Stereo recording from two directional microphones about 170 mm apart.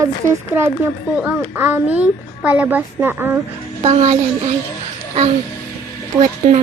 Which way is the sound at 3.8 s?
40° right (ahead or behind).